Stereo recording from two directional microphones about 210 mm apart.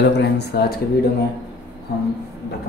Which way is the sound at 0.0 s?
55° left (ahead or behind).